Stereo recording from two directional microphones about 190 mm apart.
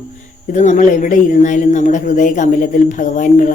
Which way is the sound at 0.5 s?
40° left (ahead or behind).